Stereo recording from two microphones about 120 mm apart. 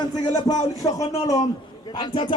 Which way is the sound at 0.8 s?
30° left (ahead or behind).